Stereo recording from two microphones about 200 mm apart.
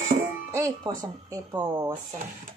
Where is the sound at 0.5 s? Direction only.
15° right (ahead or behind).